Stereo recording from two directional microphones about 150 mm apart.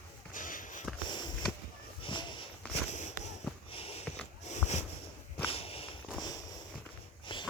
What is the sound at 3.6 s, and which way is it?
Sniff, 40° left (ahead or behind).